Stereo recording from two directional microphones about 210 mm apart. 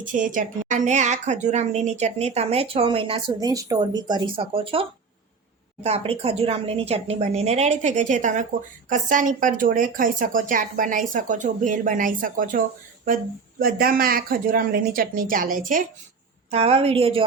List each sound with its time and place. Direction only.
0.0 s a woman's voice: 40° right (ahead or behind)
16.5 s a woman's voice: 30° right (ahead or behind)